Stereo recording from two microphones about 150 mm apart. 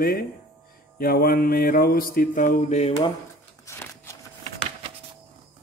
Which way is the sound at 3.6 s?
20° left (ahead or behind).